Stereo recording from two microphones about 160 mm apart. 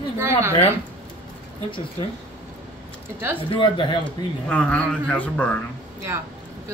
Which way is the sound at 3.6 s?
30° left (ahead or behind).